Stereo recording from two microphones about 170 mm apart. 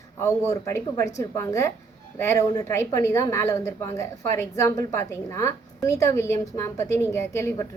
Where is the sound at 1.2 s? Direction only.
15° left (ahead or behind).